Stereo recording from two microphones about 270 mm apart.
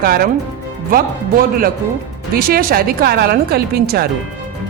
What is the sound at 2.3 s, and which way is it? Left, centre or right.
Speech, right.